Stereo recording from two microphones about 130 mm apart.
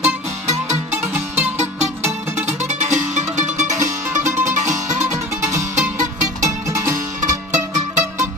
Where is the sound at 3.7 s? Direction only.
25° right (ahead or behind).